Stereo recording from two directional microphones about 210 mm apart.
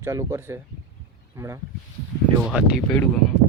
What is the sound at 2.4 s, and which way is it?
Speech, centre (ahead or behind).